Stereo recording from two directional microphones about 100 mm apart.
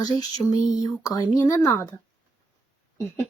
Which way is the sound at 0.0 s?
40° left (ahead or behind).